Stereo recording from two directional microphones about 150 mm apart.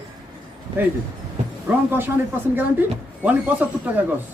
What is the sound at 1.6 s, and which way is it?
Speech, 15° right (ahead or behind).